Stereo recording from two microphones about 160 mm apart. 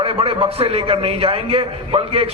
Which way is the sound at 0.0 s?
35° right (ahead or behind).